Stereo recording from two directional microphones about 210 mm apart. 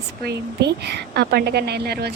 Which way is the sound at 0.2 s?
50° right (ahead or behind).